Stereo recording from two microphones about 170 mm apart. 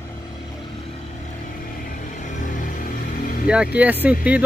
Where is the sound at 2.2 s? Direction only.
50° left (ahead or behind).